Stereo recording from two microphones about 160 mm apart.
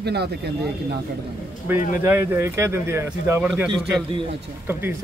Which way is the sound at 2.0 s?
15° right (ahead or behind).